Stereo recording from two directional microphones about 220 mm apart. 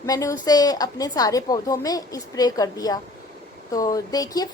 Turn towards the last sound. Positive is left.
turn(degrees=15)  # may be behind; listen again after turning